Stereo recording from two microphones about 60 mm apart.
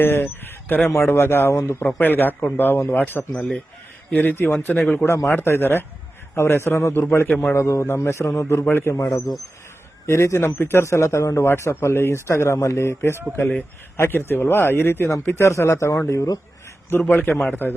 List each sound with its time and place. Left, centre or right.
0.0 s chicken: left
0.7 s speech: left
0.9 s speech: left
5.0 s speech: left
5.3 s a man's voice: left
7.5 s speech: left
10.1 s speech: left
11.4 s speech: left
17.1 s speech: left